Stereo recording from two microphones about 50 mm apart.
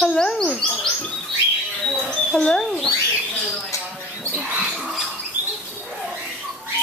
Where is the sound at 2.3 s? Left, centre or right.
Centre.